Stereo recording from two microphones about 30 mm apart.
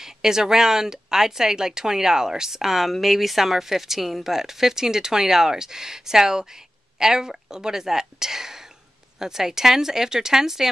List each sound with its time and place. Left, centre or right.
0.0 s a woman's voice: centre